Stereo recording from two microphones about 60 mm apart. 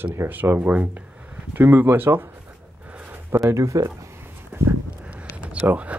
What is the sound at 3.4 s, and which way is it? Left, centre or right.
Speech, right.